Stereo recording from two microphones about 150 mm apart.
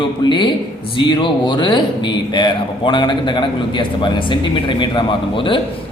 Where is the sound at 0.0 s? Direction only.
30° left (ahead or behind).